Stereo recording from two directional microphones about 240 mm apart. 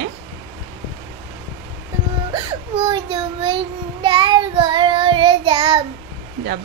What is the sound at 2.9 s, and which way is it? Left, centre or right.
Child singing, centre.